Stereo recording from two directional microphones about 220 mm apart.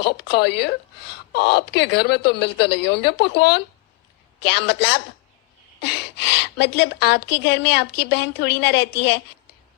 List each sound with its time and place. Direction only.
0.0 s a woman's voice: 50° left (ahead or behind)